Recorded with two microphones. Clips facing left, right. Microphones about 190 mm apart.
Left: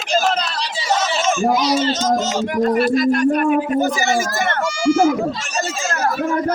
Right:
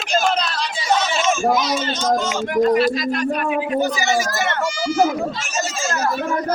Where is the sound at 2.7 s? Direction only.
50° left (ahead or behind).